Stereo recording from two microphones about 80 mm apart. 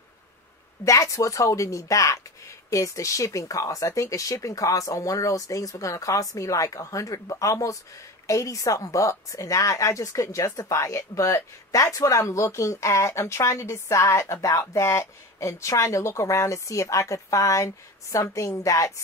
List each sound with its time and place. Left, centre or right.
0.8 s a woman's voice: left